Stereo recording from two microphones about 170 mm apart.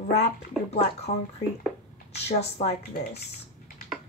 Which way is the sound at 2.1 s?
40° left (ahead or behind).